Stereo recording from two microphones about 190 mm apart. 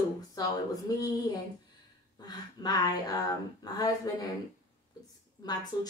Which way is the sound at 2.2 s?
20° left (ahead or behind).